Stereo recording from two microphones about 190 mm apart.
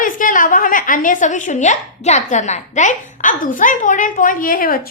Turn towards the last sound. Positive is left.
turn(degrees=50)  # may be behind; listen again after turning